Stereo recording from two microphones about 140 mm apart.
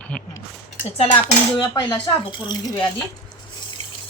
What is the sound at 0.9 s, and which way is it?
Cutlery, 50° left (ahead or behind).